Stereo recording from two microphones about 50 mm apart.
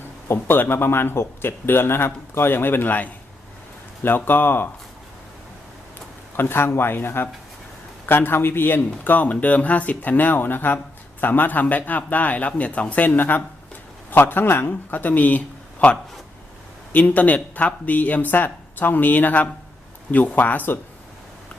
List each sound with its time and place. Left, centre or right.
0.3 s speech: left
6.3 s speech: left